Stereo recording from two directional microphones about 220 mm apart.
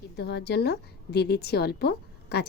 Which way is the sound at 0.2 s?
50° left (ahead or behind).